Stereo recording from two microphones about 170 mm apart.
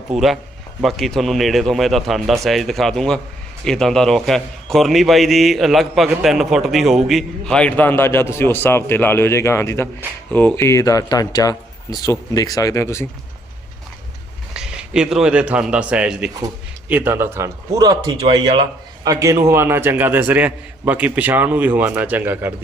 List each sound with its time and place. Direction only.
0.1 s a man's voice: centre (ahead or behind); by 13.1 s 15° left (ahead or behind)
14.5 s a man's voice: 5° right (ahead or behind)